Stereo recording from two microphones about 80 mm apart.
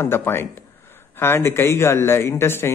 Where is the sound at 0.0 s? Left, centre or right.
Left.